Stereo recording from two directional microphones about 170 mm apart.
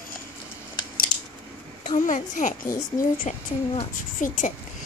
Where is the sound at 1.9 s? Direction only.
50° left (ahead or behind).